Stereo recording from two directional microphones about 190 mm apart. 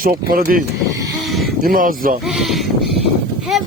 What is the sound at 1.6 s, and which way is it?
Speech, 50° right (ahead or behind).